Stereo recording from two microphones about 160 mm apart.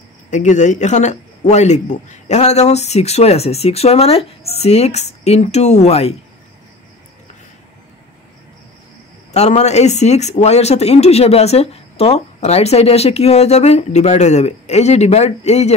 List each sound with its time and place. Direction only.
0.3 s speech: 50° left (ahead or behind)
9.3 s speech: 45° left (ahead or behind)